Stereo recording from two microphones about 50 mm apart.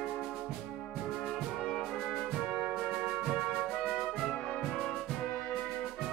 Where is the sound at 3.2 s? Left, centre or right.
Centre.